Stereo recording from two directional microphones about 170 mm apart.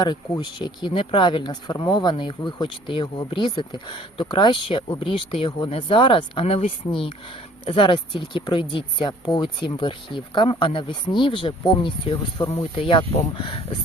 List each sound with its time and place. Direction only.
0.0 s speech: 25° left (ahead or behind)